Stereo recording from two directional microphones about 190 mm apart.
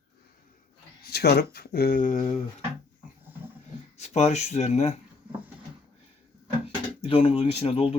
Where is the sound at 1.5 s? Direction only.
55° left (ahead or behind); by 2.4 s 35° left (ahead or behind).